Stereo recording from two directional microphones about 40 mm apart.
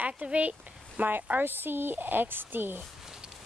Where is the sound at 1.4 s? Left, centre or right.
Right.